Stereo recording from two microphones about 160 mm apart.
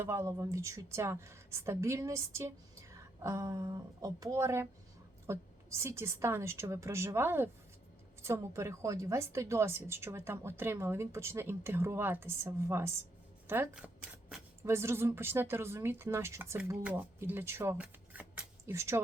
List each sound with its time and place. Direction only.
0.0 s a woman's voice: 15° right (ahead or behind)
13.7 s speech: 5° right (ahead or behind)
14.6 s a woman's voice: 15° right (ahead or behind)